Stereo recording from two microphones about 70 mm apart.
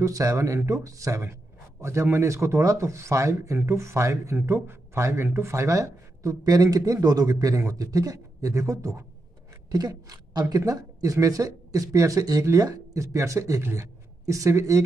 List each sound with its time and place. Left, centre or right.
0.0 s a man's voice: right
9.7 s a sound: right
10.5 s a man's voice: right